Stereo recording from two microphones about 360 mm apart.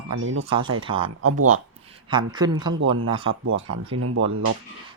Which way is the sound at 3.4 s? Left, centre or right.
Right.